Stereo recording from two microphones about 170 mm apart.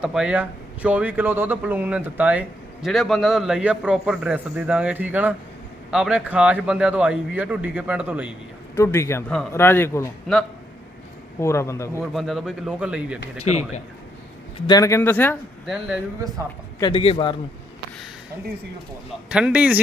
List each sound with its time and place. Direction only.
0.0 s speech: 5° right (ahead or behind)
8.7 s speech: 15° left (ahead or behind)
11.3 s speech: 15° left (ahead or behind)
12.1 s speech: centre (ahead or behind)
14.7 s speech: 20° left (ahead or behind)
15.6 s speech: 5° right (ahead or behind)
16.8 s a man's voice: 30° left (ahead or behind)
19.3 s speech: 5° right (ahead or behind)